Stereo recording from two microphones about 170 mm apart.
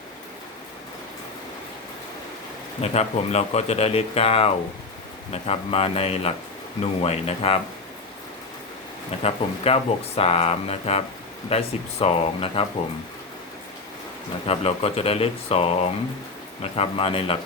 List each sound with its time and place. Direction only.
2.8 s speech: 40° left (ahead or behind)
9.2 s speech: 35° left (ahead or behind)
14.4 s speech: 35° left (ahead or behind)